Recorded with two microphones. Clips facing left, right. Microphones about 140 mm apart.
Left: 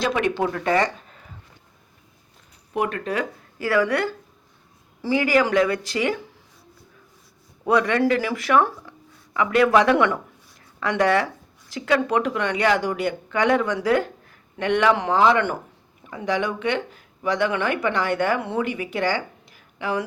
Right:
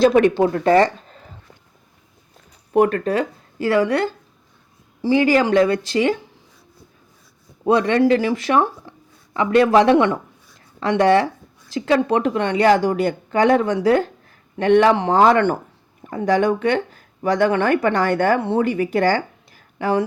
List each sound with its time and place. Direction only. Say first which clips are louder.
0.0 s a woman's voice: right 8 dB; 40° right (ahead or behind)
2.7 s speech: right 8 dB; 45° right (ahead or behind)
3.2 s a woman's voice: right 5 dB; 25° right (ahead or behind)
7.6 s a woman's voice: right 4 dB; 25° right (ahead or behind)